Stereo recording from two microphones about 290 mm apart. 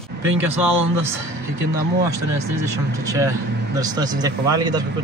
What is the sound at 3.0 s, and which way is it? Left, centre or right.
Speech, centre.